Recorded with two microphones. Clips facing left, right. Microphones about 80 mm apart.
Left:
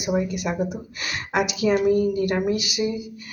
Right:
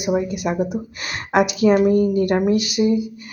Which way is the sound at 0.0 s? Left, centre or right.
Right.